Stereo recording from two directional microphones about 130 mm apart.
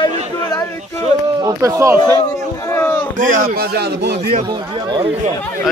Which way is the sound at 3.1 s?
90° right.